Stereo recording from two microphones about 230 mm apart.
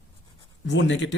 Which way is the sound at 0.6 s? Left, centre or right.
Left.